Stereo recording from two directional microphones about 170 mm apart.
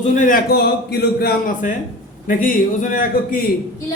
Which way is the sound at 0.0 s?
50° left (ahead or behind).